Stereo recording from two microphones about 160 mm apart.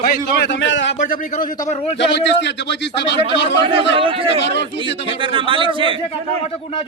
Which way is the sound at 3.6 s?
35° right (ahead or behind).